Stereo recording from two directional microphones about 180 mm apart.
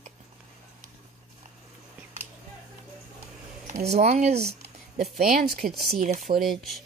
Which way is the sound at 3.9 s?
35° right (ahead or behind).